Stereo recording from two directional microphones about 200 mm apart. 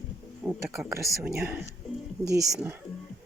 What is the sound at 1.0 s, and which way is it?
Speech, centre (ahead or behind).